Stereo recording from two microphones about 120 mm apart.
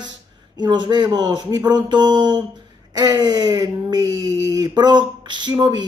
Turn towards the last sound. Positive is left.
turn(degrees=-40)  # may be behind; listen again after turning